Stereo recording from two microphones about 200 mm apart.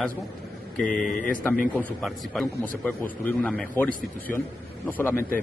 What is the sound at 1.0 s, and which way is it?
Speech, 45° left (ahead or behind).